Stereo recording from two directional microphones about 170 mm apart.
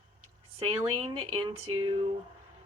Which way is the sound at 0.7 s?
30° right (ahead or behind).